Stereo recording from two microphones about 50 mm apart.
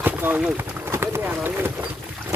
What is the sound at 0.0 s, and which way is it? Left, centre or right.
Run, right.